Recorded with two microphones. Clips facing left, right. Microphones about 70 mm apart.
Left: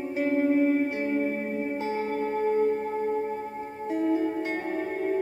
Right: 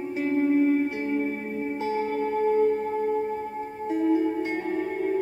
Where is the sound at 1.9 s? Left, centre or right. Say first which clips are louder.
Right 5 dB; left.